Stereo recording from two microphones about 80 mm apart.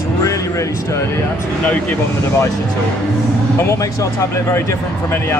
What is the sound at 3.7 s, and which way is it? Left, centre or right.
Speech, left.